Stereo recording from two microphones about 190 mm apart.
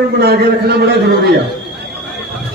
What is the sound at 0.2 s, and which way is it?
A man's voice, 60° right (ahead or behind).